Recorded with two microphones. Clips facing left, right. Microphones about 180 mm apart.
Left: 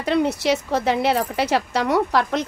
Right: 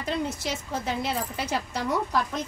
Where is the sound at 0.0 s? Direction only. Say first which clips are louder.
Left 9 dB; 70° left (ahead or behind).